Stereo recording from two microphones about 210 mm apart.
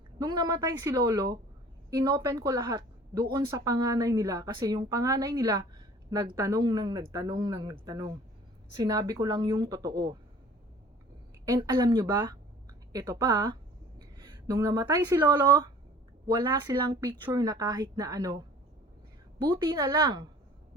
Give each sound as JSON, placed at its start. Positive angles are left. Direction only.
{"t": 0.2, "sound": "a woman's voice", "side_deg": -20}
{"t": 11.4, "sound": "a woman's voice", "side_deg": -15}